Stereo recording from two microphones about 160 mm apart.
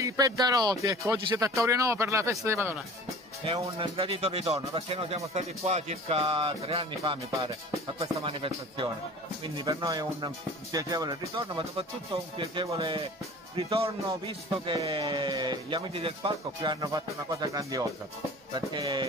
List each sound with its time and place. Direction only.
0.0 s speech: 20° right (ahead or behind)
3.4 s speech: 35° right (ahead or behind)
8.0 s speech: 35° right (ahead or behind)